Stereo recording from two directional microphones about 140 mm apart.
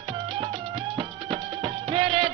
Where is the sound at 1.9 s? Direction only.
35° right (ahead or behind).